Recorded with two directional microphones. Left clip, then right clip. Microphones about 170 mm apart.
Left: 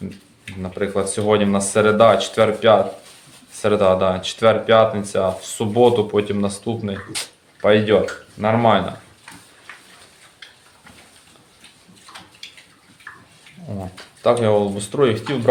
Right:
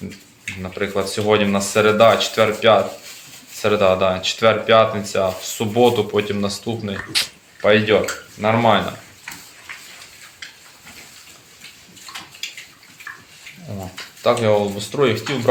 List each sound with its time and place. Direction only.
0.6 s speech: 15° left (ahead or behind)
14.3 s speech: 20° left (ahead or behind)